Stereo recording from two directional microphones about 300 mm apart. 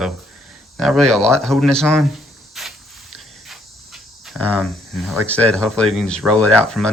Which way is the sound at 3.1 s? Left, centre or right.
Centre.